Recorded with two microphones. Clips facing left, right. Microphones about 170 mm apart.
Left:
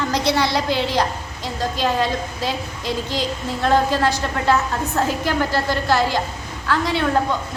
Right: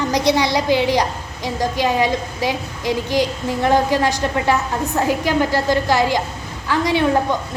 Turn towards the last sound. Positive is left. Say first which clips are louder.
# right 3 dB
turn(degrees=-15)  # may be behind; listen again after turning